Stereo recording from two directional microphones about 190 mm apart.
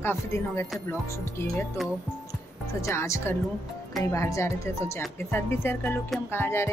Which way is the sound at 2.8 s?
15° left (ahead or behind).